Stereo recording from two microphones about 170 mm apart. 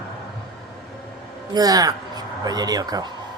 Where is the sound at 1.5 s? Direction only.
20° right (ahead or behind).